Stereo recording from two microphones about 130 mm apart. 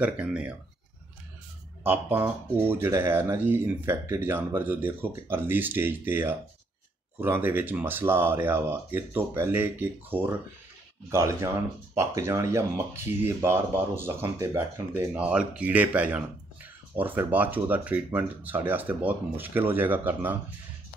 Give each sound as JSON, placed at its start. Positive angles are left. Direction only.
{"t": 0.0, "sound": "speech", "side_deg": -10}
{"t": 1.8, "sound": "speech", "side_deg": -15}
{"t": 15.1, "sound": "speech", "side_deg": -10}